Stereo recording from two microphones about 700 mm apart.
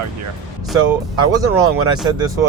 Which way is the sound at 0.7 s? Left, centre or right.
Centre.